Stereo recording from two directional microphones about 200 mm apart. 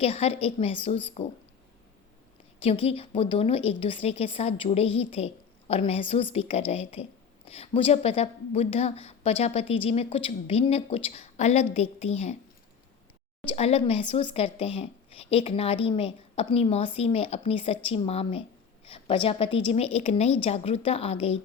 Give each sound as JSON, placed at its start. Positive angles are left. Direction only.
{"t": 0.0, "sound": "a woman's voice", "side_deg": 30}
{"t": 2.6, "sound": "speech", "side_deg": 30}
{"t": 13.5, "sound": "speech", "side_deg": 30}